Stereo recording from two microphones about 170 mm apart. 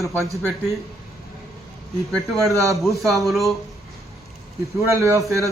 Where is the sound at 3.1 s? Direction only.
Centre (ahead or behind).